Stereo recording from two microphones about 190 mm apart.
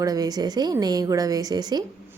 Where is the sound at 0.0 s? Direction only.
20° right (ahead or behind).